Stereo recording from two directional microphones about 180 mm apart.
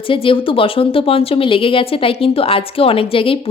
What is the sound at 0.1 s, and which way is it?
A woman's voice, 30° left (ahead or behind).